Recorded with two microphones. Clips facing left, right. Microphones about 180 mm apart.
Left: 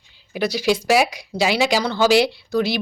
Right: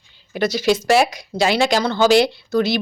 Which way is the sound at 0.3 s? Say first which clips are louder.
Right 2 dB; 10° left (ahead or behind).